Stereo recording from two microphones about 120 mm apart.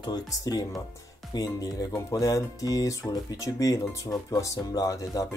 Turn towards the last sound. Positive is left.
turn(degrees=30)  # may be behind; listen again after turning